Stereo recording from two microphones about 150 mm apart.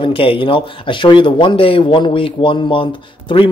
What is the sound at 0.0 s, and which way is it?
Speech, 35° left (ahead or behind).